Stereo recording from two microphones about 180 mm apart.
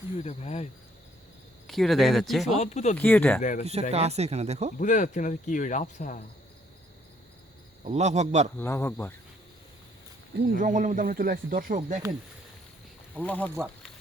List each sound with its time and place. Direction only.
0.2 s speech: 40° left (ahead or behind)
1.6 s speech: centre (ahead or behind)
2.6 s speech: 40° left (ahead or behind)
2.9 s speech: 10° left (ahead or behind)
3.6 s speech: 35° right (ahead or behind)
4.8 s speech: 45° left (ahead or behind)
7.9 s speech: 40° right (ahead or behind)
8.5 s speech: 15° left (ahead or behind)
10.3 s speech: 55° right (ahead or behind)
13.2 s speech: 10° left (ahead or behind)